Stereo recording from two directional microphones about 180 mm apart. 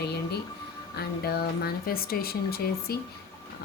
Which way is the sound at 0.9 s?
60° left (ahead or behind).